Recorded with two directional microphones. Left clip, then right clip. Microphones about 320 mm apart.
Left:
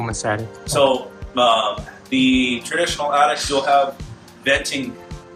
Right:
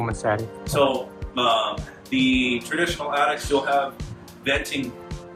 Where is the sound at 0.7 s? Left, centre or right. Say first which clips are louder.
Left 4 dB; centre.